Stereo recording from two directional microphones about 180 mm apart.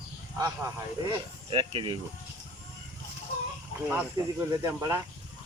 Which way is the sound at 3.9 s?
10° right (ahead or behind).